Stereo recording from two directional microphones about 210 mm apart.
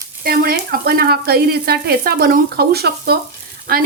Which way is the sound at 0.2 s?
45° right (ahead or behind).